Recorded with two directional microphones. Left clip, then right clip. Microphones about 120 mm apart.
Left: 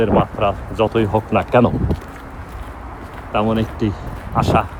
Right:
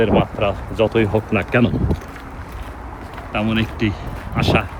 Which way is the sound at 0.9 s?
65° left (ahead or behind).